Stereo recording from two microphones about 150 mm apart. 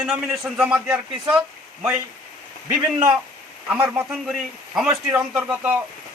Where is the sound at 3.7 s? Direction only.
10° right (ahead or behind).